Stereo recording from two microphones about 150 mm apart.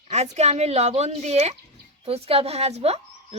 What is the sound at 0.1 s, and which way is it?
Speech, 45° right (ahead or behind).